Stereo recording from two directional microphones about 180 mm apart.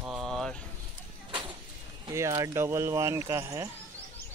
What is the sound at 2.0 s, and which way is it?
Speech, 20° right (ahead or behind).